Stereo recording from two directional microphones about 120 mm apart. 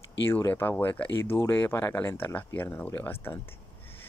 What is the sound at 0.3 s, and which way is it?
Speech, 20° left (ahead or behind).